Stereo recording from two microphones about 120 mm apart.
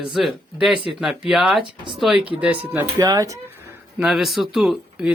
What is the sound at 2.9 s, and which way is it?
Speech, 35° right (ahead or behind).